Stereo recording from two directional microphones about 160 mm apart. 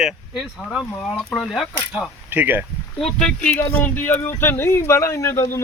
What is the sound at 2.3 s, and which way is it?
Speech, 10° right (ahead or behind).